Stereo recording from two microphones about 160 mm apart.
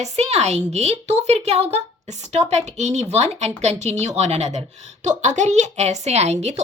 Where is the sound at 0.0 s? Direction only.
45° right (ahead or behind).